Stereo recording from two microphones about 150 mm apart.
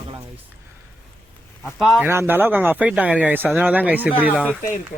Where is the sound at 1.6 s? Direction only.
Centre (ahead or behind).